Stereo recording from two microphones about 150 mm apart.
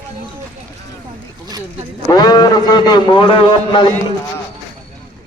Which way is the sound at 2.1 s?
25° left (ahead or behind).